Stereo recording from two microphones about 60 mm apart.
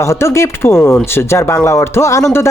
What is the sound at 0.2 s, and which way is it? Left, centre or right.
Speech, left.